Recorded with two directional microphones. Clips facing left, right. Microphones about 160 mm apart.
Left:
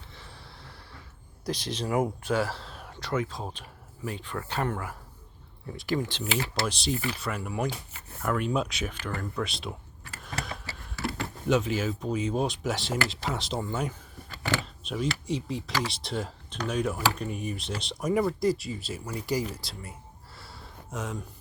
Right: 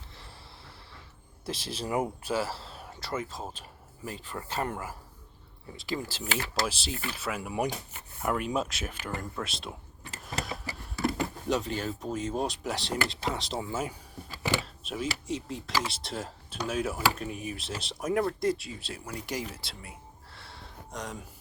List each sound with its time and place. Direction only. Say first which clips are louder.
0.1 s a sound: left 2 dB; centre (ahead or behind)
1.5 s speech: left 3 dB; 5° right (ahead or behind)
5.7 s speech: left 5 dB; 25° right (ahead or behind)
6.7 s speech: left 5 dB; centre (ahead or behind)
10.2 s a sound: right 1 dB; centre (ahead or behind)
11.4 s speech: left 6 dB; centre (ahead or behind)